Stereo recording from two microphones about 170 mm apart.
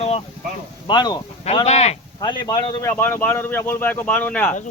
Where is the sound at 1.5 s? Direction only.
40° left (ahead or behind).